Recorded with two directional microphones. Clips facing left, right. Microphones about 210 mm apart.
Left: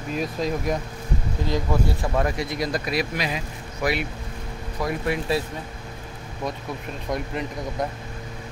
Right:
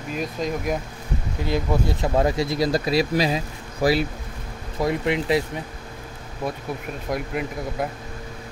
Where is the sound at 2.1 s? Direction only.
25° right (ahead or behind).